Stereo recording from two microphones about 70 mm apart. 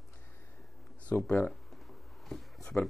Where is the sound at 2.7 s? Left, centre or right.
Left.